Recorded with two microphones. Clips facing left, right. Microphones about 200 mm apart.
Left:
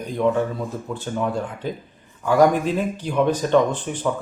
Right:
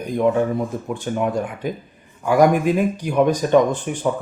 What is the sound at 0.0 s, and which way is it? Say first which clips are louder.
Speech: right 2 dB; 15° right (ahead or behind).